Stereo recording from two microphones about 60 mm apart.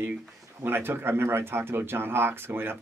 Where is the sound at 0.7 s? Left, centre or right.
Right.